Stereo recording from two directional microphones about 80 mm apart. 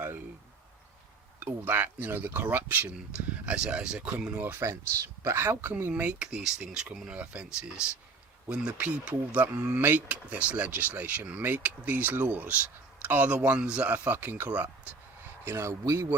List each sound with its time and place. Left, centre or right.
1.4 s speech: right
4.7 s speech: right
6.0 s speech: centre
15.2 s a sound: right
15.8 s speech: right